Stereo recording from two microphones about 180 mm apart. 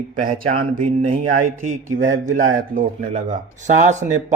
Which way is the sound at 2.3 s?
45° right (ahead or behind).